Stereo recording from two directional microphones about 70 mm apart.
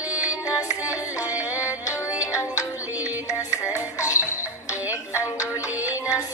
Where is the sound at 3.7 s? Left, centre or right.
Left.